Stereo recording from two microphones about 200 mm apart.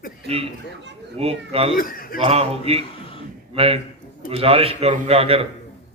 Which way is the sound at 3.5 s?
30° right (ahead or behind).